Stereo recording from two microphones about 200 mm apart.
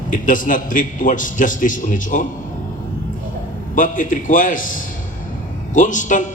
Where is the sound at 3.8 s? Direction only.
40° left (ahead or behind).